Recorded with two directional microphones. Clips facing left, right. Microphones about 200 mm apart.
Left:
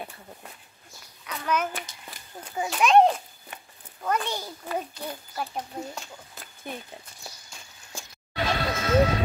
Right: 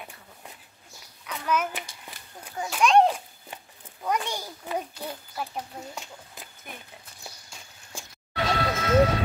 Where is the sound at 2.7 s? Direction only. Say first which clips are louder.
Left 1 dB; centre (ahead or behind).